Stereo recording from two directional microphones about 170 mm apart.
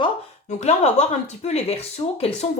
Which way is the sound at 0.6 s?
40° left (ahead or behind).